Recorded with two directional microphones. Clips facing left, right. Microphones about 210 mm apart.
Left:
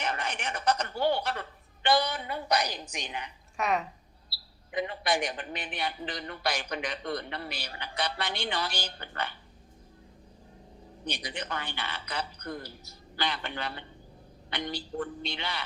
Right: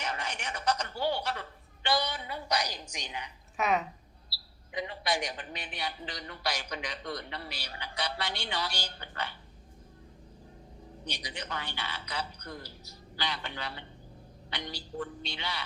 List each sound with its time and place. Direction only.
0.0 s a sound: 55° left (ahead or behind)
3.6 s speech: centre (ahead or behind)
4.7 s a man's voice: 55° left (ahead or behind)
11.0 s a man's voice: 55° left (ahead or behind)